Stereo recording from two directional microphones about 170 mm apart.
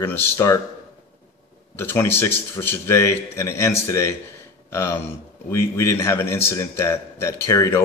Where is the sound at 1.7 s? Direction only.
15° left (ahead or behind).